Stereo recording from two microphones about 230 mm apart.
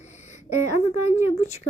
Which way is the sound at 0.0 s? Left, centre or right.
Left.